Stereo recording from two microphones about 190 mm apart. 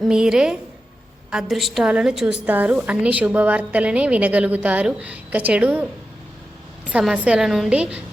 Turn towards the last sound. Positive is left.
turn(degrees=-5)  # may be behind; listen again after turning